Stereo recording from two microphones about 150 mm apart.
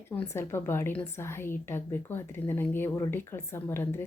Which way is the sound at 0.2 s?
15° left (ahead or behind).